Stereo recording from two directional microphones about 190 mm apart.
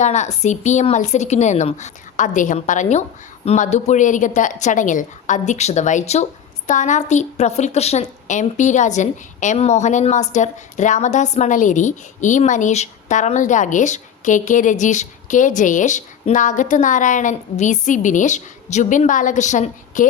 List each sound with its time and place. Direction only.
0.0 s a woman's voice: 40° left (ahead or behind)